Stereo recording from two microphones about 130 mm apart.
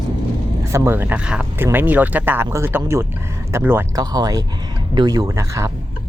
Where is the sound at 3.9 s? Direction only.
30° right (ahead or behind).